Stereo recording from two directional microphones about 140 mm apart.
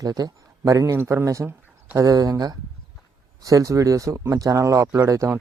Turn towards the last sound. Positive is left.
turn(degrees=-20)  # may be behind; listen again after turning